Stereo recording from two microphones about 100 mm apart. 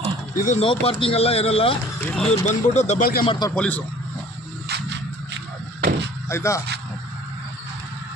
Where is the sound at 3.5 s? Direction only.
10° left (ahead or behind).